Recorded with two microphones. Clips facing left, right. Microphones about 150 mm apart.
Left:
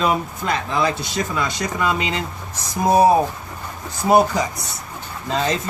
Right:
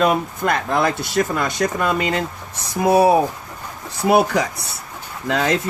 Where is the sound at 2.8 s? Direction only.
70° right (ahead or behind).